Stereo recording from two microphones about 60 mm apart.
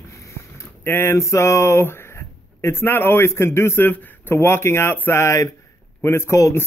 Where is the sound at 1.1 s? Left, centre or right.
Left.